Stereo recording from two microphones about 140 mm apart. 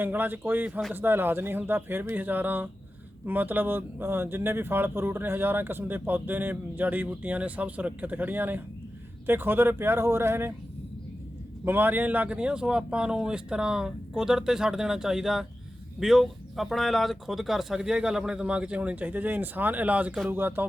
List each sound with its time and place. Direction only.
0.0 s speech: 15° right (ahead or behind)
11.6 s speech: 15° right (ahead or behind)